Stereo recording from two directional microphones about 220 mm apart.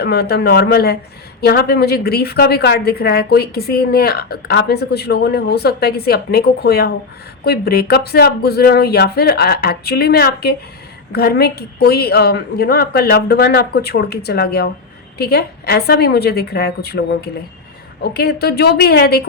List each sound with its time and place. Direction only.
0.0 s a woman's voice: 45° left (ahead or behind)